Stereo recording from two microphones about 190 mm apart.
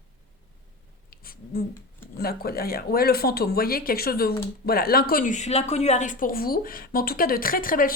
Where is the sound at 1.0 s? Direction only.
50° left (ahead or behind).